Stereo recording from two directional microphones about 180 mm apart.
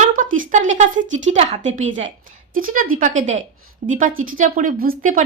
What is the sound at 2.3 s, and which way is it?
A woman's voice, 50° right (ahead or behind).